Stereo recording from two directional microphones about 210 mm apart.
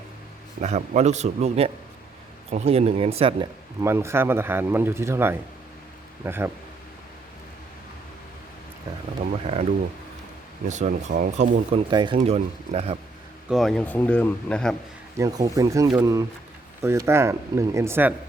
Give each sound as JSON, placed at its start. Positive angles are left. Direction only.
{"t": 0.6, "sound": "speech", "side_deg": -30}
{"t": 3.8, "sound": "a man's voice", "side_deg": -10}
{"t": 9.4, "sound": "a sound", "side_deg": -30}
{"t": 10.7, "sound": "speech", "side_deg": -35}
{"t": 11.9, "sound": "speech", "side_deg": -20}
{"t": 13.5, "sound": "speech", "side_deg": 0}
{"t": 15.2, "sound": "a man's voice", "side_deg": -15}